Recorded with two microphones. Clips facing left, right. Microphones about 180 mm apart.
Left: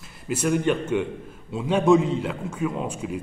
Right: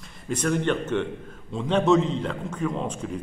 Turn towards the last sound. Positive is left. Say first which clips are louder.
# left 1 dB
turn(degrees=10)  # may be behind; listen again after turning